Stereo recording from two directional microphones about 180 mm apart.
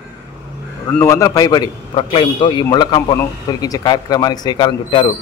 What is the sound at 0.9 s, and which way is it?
A man's voice, 15° left (ahead or behind).